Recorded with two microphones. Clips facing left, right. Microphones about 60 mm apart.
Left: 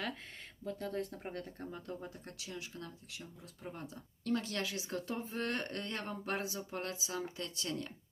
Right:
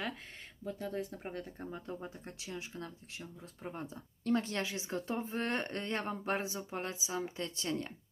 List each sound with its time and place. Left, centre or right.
0.6 s speech: centre
1.7 s speech: right
7.3 s speech: right